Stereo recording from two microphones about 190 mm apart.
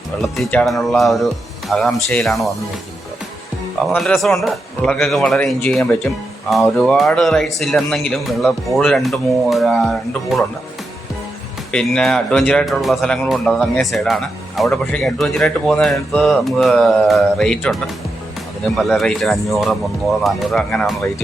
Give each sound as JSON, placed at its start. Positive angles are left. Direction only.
{"t": 0.2, "sound": "speech", "side_deg": 0}
{"t": 3.8, "sound": "speech", "side_deg": 0}
{"t": 11.7, "sound": "speech", "side_deg": 5}
{"t": 18.8, "sound": "speech", "side_deg": 0}